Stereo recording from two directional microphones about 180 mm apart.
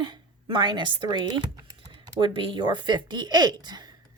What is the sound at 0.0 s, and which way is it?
Speech, 25° right (ahead or behind).